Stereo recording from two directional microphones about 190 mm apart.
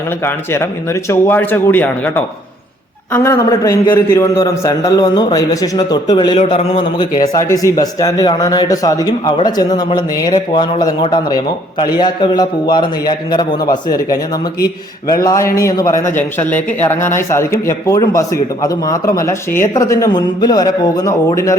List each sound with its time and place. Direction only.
0.3 s a man's voice: 15° left (ahead or behind)
15.2 s a man's voice: 20° left (ahead or behind)